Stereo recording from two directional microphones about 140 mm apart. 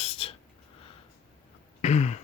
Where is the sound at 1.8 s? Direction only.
55° left (ahead or behind).